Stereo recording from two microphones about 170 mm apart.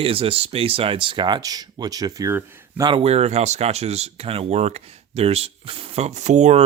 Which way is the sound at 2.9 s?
35° right (ahead or behind).